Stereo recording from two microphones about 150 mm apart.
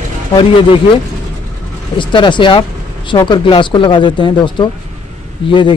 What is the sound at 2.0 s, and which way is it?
A woman's voice, 30° left (ahead or behind).